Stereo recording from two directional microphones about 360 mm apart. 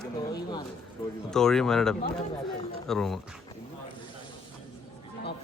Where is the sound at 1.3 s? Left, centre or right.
Centre.